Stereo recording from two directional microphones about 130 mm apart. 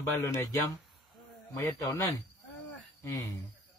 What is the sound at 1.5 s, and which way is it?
Speech, 20° left (ahead or behind).